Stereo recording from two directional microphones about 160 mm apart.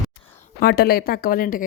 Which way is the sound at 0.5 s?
75° left (ahead or behind).